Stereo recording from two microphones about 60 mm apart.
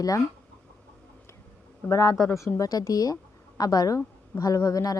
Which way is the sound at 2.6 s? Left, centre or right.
Left.